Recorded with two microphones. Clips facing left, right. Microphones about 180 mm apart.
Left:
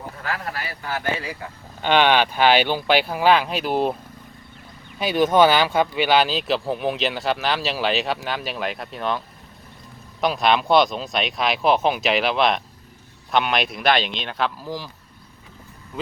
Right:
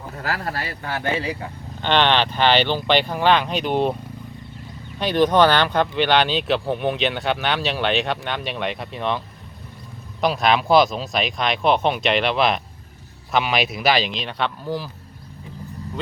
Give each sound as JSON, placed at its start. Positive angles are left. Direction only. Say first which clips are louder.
{"t": 0.2, "sound": "speech", "louder": "right 3 dB", "side_deg": -35}
{"t": 1.8, "sound": "speech", "louder": "left 1 dB", "side_deg": 10}
{"t": 4.9, "sound": "speech", "louder": "even", "side_deg": 5}